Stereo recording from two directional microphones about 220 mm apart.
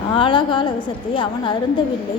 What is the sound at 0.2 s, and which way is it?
A woman's voice, 20° left (ahead or behind).